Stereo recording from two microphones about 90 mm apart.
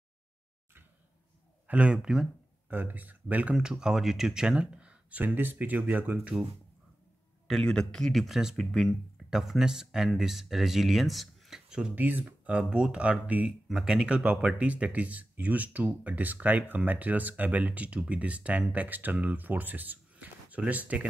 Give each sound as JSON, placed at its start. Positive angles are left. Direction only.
{"t": 1.7, "sound": "speech", "side_deg": -10}
{"t": 2.7, "sound": "speech", "side_deg": -20}
{"t": 7.4, "sound": "speech", "side_deg": 5}
{"t": 11.9, "sound": "speech", "side_deg": -20}